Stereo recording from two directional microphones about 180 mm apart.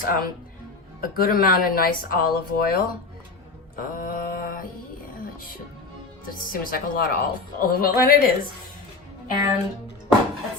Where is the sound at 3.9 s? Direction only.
50° left (ahead or behind).